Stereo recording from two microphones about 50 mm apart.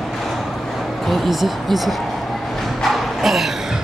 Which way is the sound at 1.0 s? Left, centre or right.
Centre.